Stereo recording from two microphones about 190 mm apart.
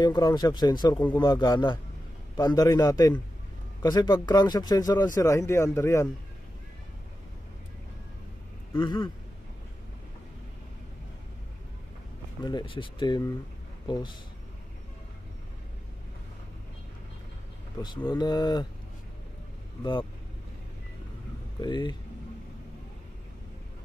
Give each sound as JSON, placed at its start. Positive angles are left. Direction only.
{"t": 0.0, "sound": "speech", "side_deg": 20}
{"t": 8.7, "sound": "speech", "side_deg": 25}
{"t": 12.4, "sound": "speech", "side_deg": 25}
{"t": 17.7, "sound": "speech", "side_deg": 25}
{"t": 19.8, "sound": "speech", "side_deg": 25}
{"t": 21.5, "sound": "speech", "side_deg": 20}